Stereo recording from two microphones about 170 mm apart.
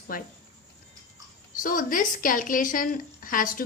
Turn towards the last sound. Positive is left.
turn(degrees=55)  # may be behind; listen again after turning